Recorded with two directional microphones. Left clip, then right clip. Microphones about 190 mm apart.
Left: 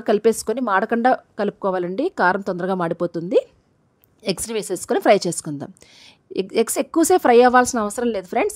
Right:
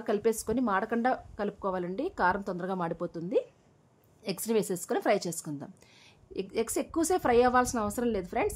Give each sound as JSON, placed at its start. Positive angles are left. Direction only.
{"t": 0.0, "sound": "a woman's voice", "side_deg": 40}